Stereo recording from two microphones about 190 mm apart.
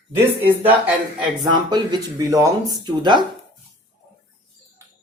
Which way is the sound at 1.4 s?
20° right (ahead or behind).